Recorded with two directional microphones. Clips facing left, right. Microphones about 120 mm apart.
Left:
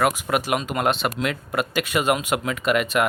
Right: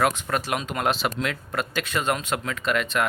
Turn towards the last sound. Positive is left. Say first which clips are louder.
# left 4 dB
turn(degrees=10)  # may be behind; listen again after turning